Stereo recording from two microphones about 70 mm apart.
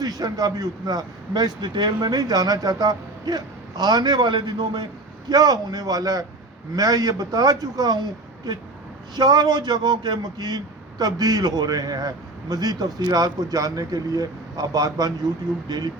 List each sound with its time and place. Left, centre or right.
0.0 s speech: right
5.3 s a man's voice: right
9.1 s speech: right